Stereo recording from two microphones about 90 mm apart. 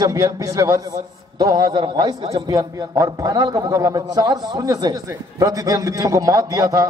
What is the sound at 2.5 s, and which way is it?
A man's voice, 45° right (ahead or behind).